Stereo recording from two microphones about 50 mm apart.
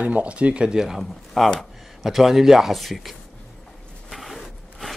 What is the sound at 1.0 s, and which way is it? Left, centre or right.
Speech, centre.